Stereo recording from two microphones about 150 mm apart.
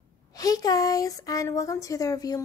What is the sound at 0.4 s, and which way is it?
A woman's voice, 25° left (ahead or behind).